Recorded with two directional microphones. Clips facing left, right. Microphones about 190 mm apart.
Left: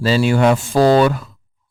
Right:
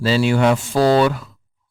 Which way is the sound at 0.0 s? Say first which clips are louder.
Left 2 dB; 45° left (ahead or behind).